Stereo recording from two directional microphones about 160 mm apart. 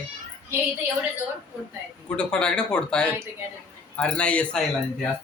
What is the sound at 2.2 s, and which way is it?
Speech, 5° left (ahead or behind).